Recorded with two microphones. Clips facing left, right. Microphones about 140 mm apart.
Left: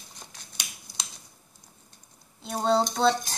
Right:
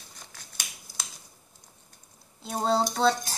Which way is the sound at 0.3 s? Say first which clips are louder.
Right 1 dB; 20° left (ahead or behind).